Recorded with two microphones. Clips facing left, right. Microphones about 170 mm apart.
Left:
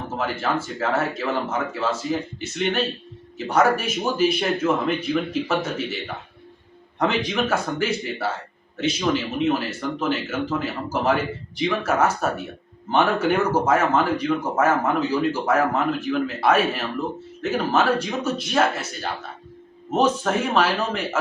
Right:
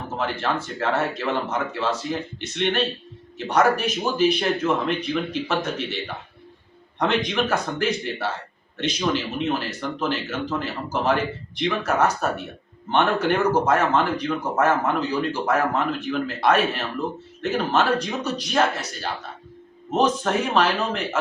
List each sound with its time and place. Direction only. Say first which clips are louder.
0.2 s speech: left 1 dB; 5° left (ahead or behind)
7.0 s speech: even; 5° left (ahead or behind)